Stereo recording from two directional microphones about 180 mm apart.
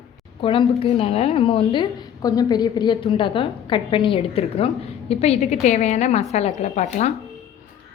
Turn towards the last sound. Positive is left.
turn(degrees=40)  # may be behind; listen again after turning